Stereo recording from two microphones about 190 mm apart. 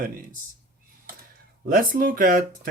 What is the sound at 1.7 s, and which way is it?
Speech, 50° right (ahead or behind).